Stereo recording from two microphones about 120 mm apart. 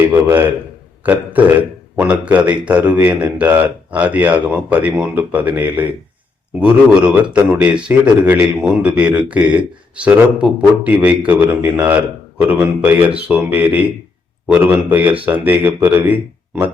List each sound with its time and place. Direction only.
0.0 s a man's voice: 20° right (ahead or behind)